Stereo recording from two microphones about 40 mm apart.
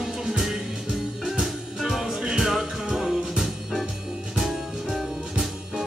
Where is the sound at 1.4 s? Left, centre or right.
Centre.